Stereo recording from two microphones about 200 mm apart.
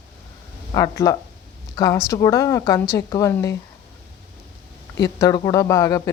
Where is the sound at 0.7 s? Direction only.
15° left (ahead or behind).